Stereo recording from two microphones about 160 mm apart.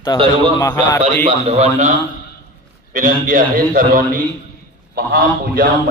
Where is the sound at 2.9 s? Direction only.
55° right (ahead or behind).